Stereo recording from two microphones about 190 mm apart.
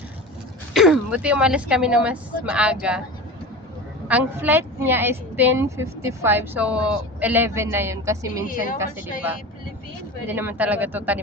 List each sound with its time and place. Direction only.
0.7 s speech: 5° right (ahead or behind)
4.1 s speech: 10° right (ahead or behind)
8.4 s a woman's voice: 45° left (ahead or behind)
10.2 s speech: 10° right (ahead or behind)